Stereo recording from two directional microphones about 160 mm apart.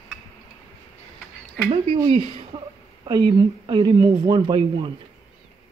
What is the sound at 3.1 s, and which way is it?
Speech, 30° right (ahead or behind).